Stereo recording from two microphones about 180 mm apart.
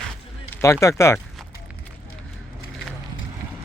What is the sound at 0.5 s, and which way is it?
Speech, 15° left (ahead or behind).